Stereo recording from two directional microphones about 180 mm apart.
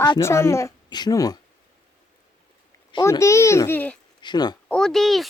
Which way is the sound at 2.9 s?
20° left (ahead or behind).